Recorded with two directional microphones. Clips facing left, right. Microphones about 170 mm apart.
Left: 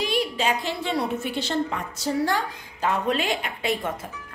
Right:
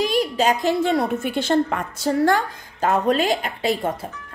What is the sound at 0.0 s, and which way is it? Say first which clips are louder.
A woman's voice: right 5 dB; 40° right (ahead or behind).